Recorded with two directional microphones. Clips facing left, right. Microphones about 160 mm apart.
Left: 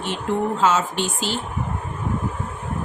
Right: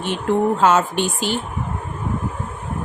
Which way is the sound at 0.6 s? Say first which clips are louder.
Right 4 dB; 55° right (ahead or behind).